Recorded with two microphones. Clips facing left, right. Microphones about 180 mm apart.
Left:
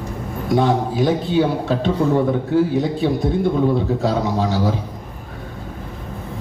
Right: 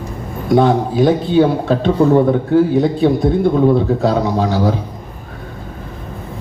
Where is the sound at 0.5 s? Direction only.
55° right (ahead or behind).